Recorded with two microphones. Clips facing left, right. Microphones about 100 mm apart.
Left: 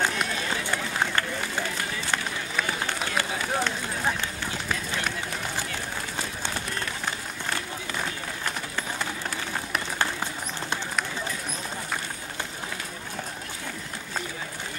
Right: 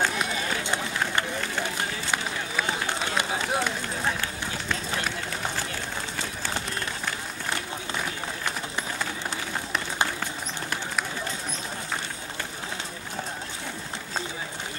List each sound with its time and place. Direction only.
0.3 s run: 20° right (ahead or behind)